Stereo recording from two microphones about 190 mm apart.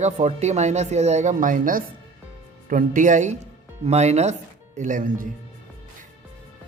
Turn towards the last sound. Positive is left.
turn(degrees=-45)  # may be behind; listen again after turning